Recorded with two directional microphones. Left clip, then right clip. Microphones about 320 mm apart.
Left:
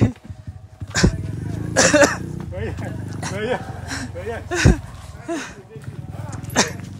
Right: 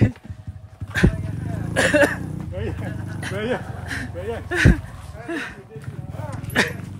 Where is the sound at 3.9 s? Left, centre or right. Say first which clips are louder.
Even; centre.